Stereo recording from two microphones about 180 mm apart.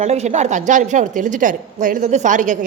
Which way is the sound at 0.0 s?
40° right (ahead or behind).